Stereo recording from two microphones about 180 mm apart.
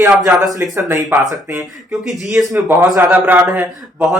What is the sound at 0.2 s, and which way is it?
Speech, centre (ahead or behind).